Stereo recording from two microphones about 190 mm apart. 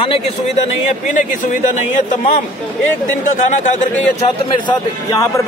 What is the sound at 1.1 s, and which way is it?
Speech, 40° left (ahead or behind).